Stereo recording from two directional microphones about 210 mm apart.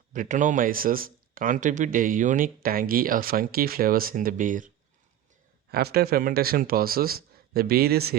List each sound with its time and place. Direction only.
0.1 s speech: 35° right (ahead or behind)
5.7 s speech: 50° right (ahead or behind)